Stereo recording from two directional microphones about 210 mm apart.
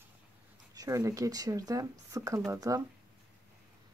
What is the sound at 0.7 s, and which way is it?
Speech, 15° right (ahead or behind).